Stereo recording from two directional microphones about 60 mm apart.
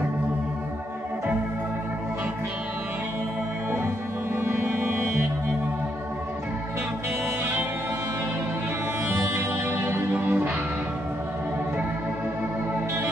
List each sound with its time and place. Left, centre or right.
4.4 s music: right
9.1 s music: right
10.1 s music: right